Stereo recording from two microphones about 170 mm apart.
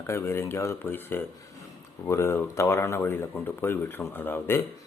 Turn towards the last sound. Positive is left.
turn(degrees=15)  # may be behind; listen again after turning